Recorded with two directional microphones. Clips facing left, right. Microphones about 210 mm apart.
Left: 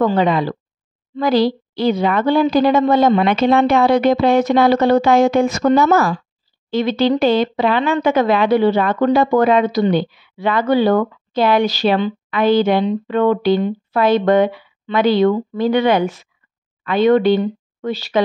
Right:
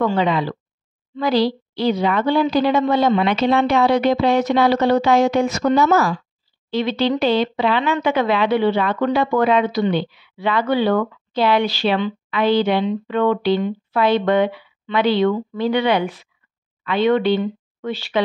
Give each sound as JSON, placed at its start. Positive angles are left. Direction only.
{"t": 0.0, "sound": "speech", "side_deg": 45}